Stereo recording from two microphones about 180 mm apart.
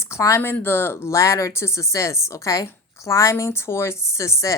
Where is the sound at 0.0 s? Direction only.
15° left (ahead or behind).